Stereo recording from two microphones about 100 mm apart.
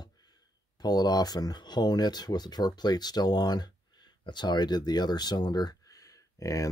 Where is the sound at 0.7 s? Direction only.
40° left (ahead or behind).